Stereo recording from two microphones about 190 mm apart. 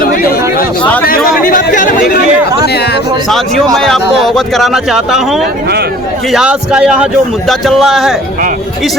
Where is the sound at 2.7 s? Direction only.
60° left (ahead or behind).